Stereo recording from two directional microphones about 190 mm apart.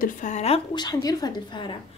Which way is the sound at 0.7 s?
20° left (ahead or behind).